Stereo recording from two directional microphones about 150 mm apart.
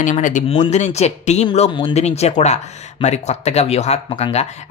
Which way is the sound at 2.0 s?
45° left (ahead or behind).